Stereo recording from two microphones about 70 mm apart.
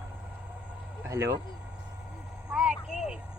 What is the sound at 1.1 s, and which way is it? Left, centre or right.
Vehicle, right.